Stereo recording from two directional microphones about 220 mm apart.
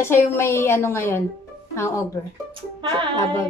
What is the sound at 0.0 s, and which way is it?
A woman's voice, 10° left (ahead or behind).